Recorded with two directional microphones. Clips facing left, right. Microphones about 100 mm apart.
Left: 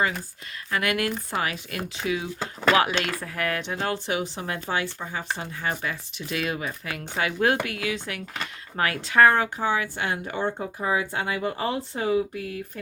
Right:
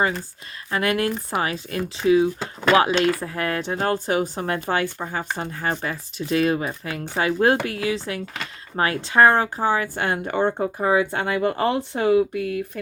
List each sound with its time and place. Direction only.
0.7 s a woman's voice: 30° right (ahead or behind); by 12.8 s 75° right (ahead or behind)